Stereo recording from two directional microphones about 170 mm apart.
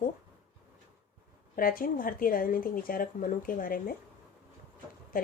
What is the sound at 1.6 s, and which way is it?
Speech, 55° left (ahead or behind).